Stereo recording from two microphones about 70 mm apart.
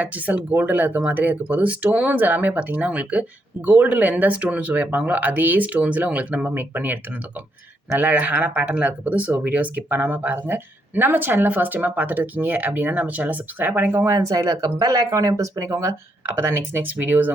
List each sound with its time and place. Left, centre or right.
0.0 s speech: right
13.9 s speech: right
14.2 s speech: right
16.4 s speech: right